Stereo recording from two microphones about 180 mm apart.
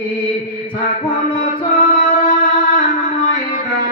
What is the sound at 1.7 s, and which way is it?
Music, 45° left (ahead or behind).